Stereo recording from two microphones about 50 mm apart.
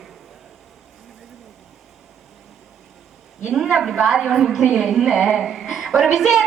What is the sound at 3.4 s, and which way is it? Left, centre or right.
A woman's voice, centre.